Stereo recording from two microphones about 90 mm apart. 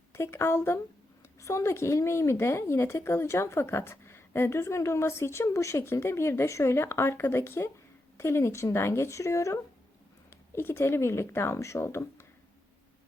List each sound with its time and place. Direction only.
0.1 s a woman's voice: 30° left (ahead or behind)